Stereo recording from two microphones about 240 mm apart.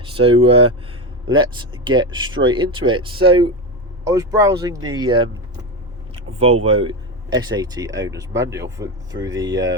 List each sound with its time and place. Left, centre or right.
0.0 s speech: right
6.4 s speech: right